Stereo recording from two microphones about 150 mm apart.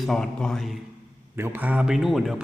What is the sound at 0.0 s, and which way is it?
Speech, 5° left (ahead or behind).